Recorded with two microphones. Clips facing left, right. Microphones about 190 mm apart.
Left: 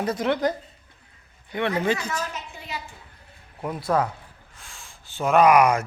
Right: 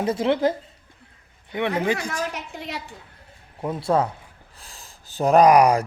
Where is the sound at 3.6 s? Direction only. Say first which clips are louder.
Right 2 dB; 25° right (ahead or behind).